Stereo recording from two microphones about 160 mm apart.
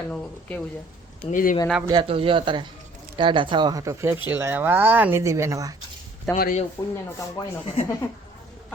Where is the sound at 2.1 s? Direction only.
35° right (ahead or behind); by 5.7 s 20° right (ahead or behind).